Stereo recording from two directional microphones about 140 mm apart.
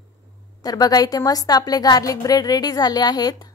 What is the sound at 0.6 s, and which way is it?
A woman's voice, 25° left (ahead or behind).